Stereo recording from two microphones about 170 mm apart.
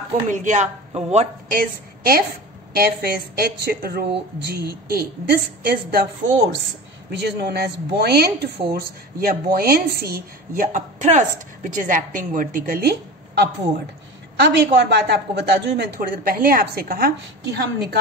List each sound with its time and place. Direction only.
0.3 s speech: 45° right (ahead or behind)
1.5 s a woman's voice: 60° right (ahead or behind)
7.1 s a woman's voice: 80° right
14.4 s a woman's voice: 85° right; by 17.1 s 60° right (ahead or behind)
17.6 s a woman's voice: 75° right (ahead or behind)